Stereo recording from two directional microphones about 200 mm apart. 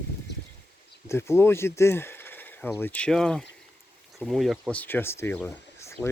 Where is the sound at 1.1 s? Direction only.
15° left (ahead or behind).